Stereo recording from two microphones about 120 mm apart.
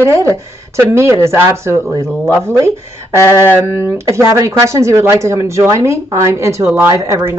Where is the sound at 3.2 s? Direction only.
25° left (ahead or behind).